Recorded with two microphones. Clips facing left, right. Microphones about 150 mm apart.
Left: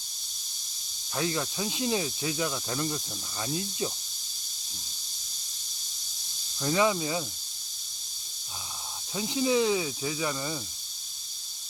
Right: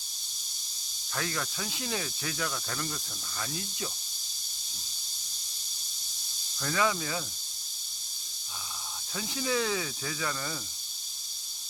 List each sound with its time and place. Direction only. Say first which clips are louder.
1.1 s snake: left 5 dB; 20° left (ahead or behind)
6.6 s snake: left 4 dB; 20° left (ahead or behind)
9.1 s snake: left 5 dB; 20° left (ahead or behind)